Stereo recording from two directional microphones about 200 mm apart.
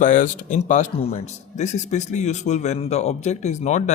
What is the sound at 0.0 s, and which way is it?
Speech, 40° left (ahead or behind).